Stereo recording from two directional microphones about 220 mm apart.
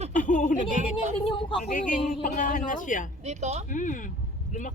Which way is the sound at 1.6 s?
40° left (ahead or behind).